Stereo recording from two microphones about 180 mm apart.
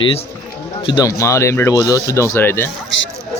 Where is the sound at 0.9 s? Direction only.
20° left (ahead or behind).